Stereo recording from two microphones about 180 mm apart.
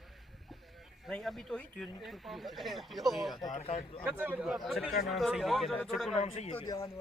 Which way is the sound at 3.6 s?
30° left (ahead or behind).